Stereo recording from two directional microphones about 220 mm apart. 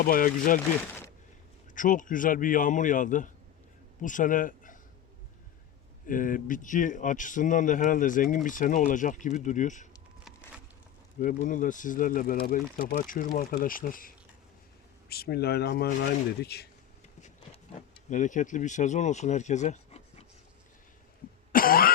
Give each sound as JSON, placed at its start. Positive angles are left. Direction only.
{"t": 0.0, "sound": "speech", "side_deg": 40}
{"t": 1.7, "sound": "speech", "side_deg": 35}
{"t": 6.1, "sound": "speech", "side_deg": 35}
{"t": 11.2, "sound": "speech", "side_deg": 35}
{"t": 15.1, "sound": "speech", "side_deg": 45}
{"t": 18.1, "sound": "speech", "side_deg": 35}
{"t": 21.5, "sound": "cough", "side_deg": 40}